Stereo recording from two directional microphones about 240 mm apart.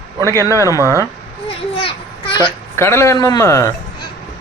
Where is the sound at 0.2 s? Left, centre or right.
Centre.